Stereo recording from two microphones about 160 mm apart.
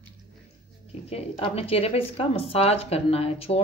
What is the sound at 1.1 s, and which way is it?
Speech, 40° left (ahead or behind).